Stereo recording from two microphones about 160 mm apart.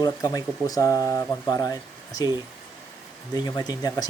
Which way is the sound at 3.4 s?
25° left (ahead or behind).